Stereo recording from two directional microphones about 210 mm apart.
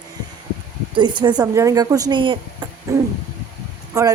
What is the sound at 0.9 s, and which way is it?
A woman's voice, 20° right (ahead or behind).